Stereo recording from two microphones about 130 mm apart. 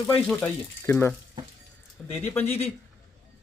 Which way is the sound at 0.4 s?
15° left (ahead or behind).